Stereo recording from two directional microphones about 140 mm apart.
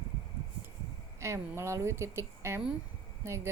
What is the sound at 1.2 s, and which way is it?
A woman's voice, 20° right (ahead or behind).